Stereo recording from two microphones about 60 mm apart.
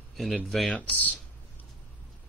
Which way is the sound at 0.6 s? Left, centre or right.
Left.